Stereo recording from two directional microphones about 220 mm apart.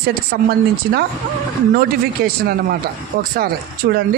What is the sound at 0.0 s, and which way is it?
A man's voice, 45° right (ahead or behind).